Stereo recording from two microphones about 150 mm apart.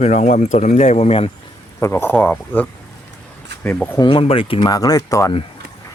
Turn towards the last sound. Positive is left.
turn(degrees=25)  # may be behind; listen again after turning